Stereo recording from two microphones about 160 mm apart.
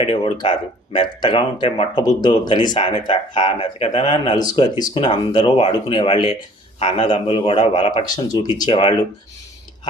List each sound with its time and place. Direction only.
0.0 s a man's voice: 30° left (ahead or behind)